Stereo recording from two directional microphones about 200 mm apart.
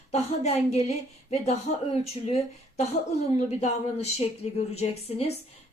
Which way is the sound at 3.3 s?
35° left (ahead or behind).